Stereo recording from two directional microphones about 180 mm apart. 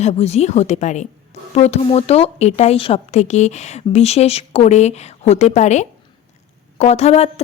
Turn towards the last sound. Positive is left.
turn(degrees=35)  # may be behind; listen again after turning